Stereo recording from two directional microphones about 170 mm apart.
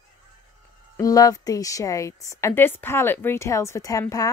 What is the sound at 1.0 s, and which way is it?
A woman's voice, 20° left (ahead or behind).